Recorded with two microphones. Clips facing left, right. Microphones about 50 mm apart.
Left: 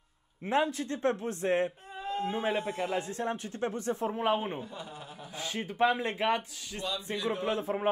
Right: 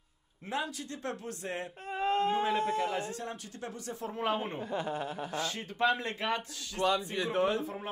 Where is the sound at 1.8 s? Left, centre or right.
Right.